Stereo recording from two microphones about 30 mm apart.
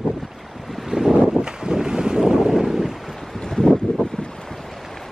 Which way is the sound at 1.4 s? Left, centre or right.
Right.